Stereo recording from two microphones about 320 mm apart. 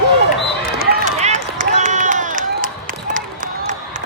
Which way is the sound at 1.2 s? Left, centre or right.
Right.